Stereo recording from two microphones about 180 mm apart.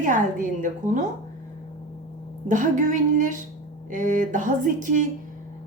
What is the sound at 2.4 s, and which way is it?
A woman's voice, 45° right (ahead or behind).